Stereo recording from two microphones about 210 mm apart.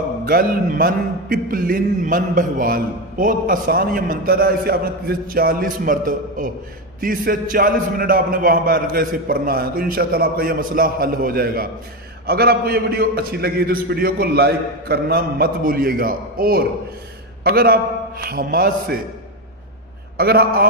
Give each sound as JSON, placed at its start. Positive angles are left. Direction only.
{"t": 0.2, "sound": "a man's voice", "side_deg": -45}
{"t": 20.2, "sound": "a man's voice", "side_deg": -45}